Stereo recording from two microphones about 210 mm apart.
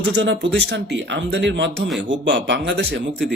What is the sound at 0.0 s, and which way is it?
Speech, 55° right (ahead or behind).